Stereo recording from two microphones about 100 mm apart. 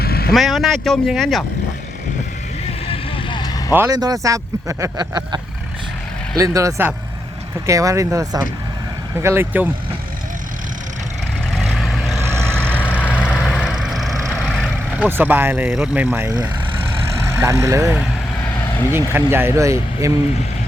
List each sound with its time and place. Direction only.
0.3 s speech: centre (ahead or behind)
2.8 s vehicle: 65° left (ahead or behind)
3.8 s speech: 40° right (ahead or behind)
4.9 s vehicle: 45° right (ahead or behind)
6.3 s speech: 35° right (ahead or behind)
9.1 s speech: 25° right (ahead or behind)
11.5 s vehicle: centre (ahead or behind)
12.2 s vehicle: 25° right (ahead or behind)
12.5 s vehicle: 10° left (ahead or behind)
13.1 s vehicle: 10° right (ahead or behind)
14.9 s speech: 15° right (ahead or behind)
16.0 s speech: 25° right (ahead or behind)